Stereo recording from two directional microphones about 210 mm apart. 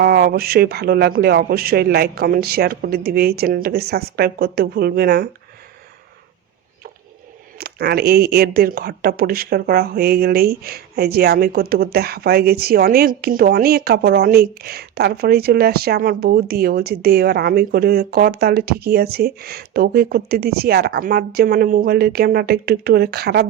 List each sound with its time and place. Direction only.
0.0 s speech: 50° right (ahead or behind)
7.6 s speech: 50° right (ahead or behind)